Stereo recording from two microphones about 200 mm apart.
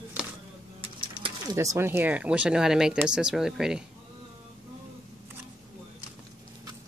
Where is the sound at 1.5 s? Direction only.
15° right (ahead or behind).